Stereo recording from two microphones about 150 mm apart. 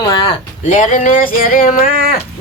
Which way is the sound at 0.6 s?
55° left (ahead or behind).